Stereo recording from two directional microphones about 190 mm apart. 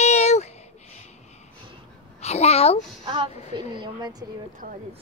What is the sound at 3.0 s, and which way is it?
Speech, 30° right (ahead or behind).